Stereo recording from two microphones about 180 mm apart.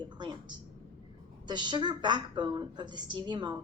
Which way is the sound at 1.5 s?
25° right (ahead or behind).